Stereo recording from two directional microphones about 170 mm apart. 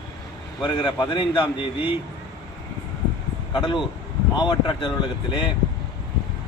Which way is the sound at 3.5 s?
25° left (ahead or behind).